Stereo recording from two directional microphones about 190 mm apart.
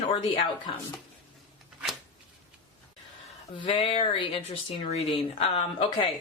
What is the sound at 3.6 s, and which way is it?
Speech, 30° left (ahead or behind).